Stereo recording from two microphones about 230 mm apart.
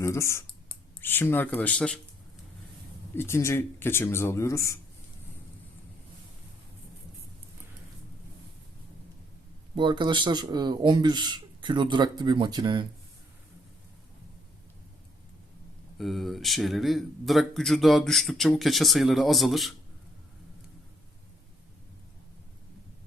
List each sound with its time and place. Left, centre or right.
0.0 s speech: centre
3.2 s speech: centre
9.7 s speech: centre
16.0 s speech: centre